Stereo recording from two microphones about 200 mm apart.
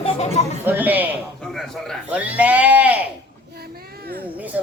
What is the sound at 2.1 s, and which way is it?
Speech, 5° right (ahead or behind).